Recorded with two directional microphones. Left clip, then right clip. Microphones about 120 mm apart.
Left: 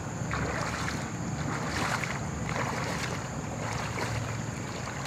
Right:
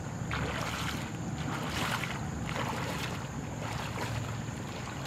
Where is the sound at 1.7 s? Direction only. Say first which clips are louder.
Left 3 dB; 5° right (ahead or behind).